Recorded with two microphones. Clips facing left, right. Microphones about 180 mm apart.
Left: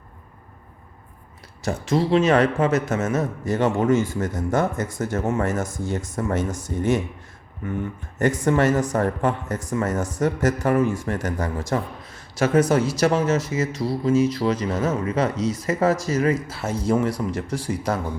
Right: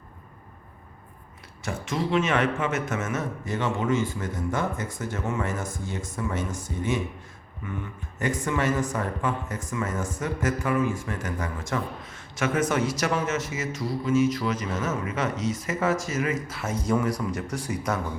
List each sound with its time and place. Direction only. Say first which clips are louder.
1.6 s a man's voice: left 7 dB; 35° left (ahead or behind)
8.4 s a man's voice: left 6 dB; 40° left (ahead or behind)